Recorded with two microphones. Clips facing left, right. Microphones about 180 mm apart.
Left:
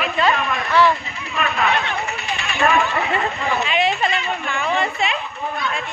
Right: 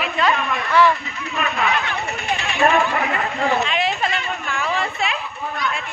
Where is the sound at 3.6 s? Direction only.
Centre (ahead or behind).